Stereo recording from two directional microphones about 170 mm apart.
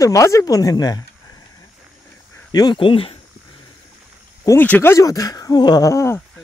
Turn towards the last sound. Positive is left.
turn(degrees=15)  # may be behind; listen again after turning